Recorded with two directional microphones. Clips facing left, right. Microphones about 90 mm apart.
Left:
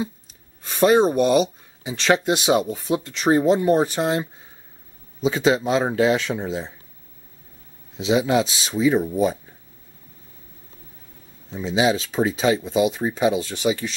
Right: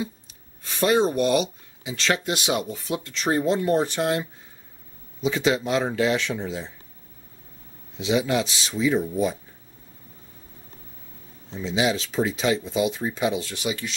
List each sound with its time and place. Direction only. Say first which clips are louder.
0.6 s a sound: left 5 dB; 20° left (ahead or behind)
1.2 s speech: left 4 dB; 35° left (ahead or behind)
2.0 s speech: left 6 dB; 20° left (ahead or behind)
8.1 s speech: left 4 dB; 30° left (ahead or behind)
11.6 s speech: left 4 dB; 30° left (ahead or behind)
12.6 s speech: left 4 dB; 20° left (ahead or behind)